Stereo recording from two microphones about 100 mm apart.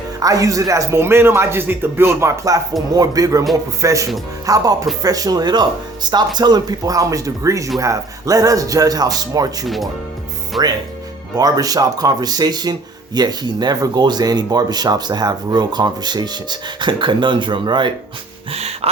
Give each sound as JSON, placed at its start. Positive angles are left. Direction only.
{"t": 0.2, "sound": "a man's voice", "side_deg": -35}
{"t": 9.6, "sound": "speech", "side_deg": 0}
{"t": 11.3, "sound": "a man's voice", "side_deg": -40}
{"t": 18.5, "sound": "music", "side_deg": -90}